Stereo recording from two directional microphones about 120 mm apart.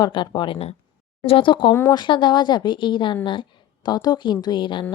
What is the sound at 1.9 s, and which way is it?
A woman's voice, 40° left (ahead or behind).